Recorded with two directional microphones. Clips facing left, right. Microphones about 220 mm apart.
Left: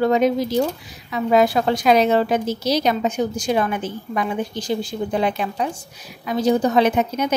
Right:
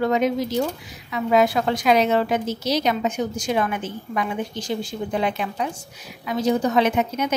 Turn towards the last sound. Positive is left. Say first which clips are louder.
# left 2 dB
turn(degrees=35)  # may be behind; listen again after turning